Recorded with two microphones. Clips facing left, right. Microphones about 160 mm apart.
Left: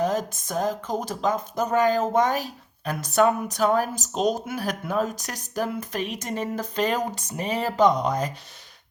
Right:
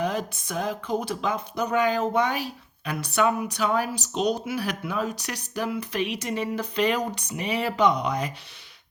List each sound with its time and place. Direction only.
0.0 s speech: 40° left (ahead or behind)